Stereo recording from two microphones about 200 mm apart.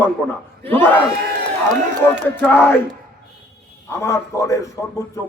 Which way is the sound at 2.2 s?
10° left (ahead or behind).